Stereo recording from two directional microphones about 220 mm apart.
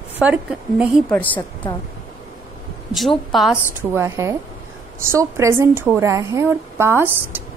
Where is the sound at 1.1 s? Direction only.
10° left (ahead or behind).